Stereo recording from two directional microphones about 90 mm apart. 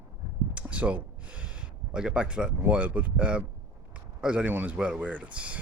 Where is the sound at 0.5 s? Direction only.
15° right (ahead or behind).